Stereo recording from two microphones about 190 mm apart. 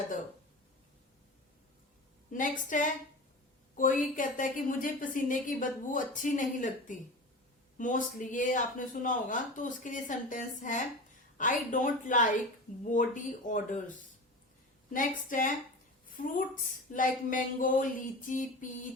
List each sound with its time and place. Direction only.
2.3 s a woman's voice: 45° left (ahead or behind)
14.9 s a woman's voice: 45° left (ahead or behind)
16.9 s a woman's voice: 45° left (ahead or behind)